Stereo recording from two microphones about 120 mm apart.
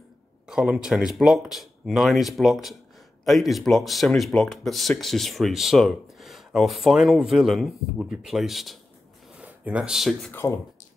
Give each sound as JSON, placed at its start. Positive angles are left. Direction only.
{"t": 0.5, "sound": "speech", "side_deg": -5}
{"t": 10.3, "sound": "speech", "side_deg": 25}